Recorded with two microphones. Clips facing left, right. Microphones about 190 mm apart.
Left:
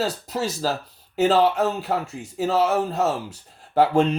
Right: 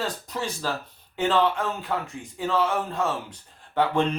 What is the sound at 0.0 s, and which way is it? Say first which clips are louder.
Speech: left 5 dB; 40° left (ahead or behind).